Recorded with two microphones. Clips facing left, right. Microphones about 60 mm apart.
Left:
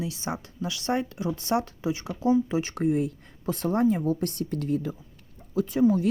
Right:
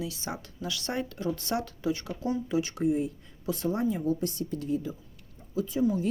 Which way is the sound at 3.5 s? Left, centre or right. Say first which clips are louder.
Left 5 dB; left.